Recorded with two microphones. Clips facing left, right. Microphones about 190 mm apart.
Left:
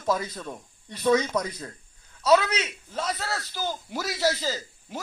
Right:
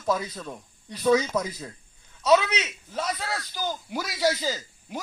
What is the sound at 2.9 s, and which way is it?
Speech, 5° right (ahead or behind).